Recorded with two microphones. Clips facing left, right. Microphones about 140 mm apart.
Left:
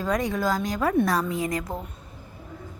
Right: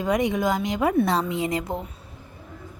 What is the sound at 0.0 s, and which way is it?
Speech, 20° right (ahead or behind).